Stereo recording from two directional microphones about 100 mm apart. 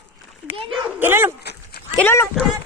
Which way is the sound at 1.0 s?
20° right (ahead or behind).